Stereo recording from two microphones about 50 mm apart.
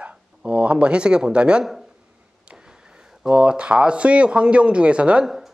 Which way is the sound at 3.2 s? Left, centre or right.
Centre.